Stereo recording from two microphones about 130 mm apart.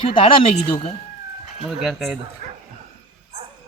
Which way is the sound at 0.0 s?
40° left (ahead or behind).